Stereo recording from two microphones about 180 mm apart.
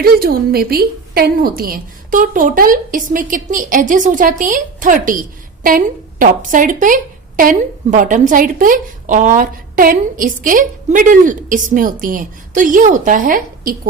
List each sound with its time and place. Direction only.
0.0 s a woman's voice: 55° right (ahead or behind)